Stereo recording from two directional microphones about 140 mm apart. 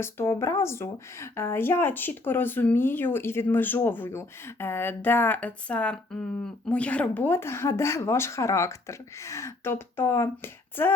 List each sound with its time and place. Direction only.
0.0 s speech: 20° left (ahead or behind)